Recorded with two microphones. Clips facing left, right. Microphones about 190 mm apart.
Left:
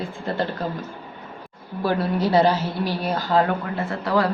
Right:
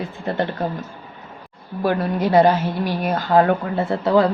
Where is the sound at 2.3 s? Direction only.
50° right (ahead or behind).